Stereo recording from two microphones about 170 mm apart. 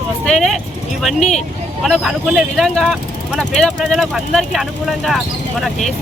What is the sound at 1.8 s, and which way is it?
Speech, centre (ahead or behind).